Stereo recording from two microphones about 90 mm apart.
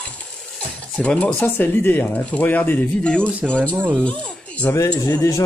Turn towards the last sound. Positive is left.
turn(degrees=40)  # may be behind; listen again after turning